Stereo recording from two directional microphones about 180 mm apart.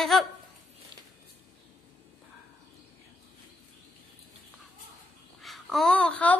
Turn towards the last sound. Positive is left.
turn(degrees=10)  # may be behind; listen again after turning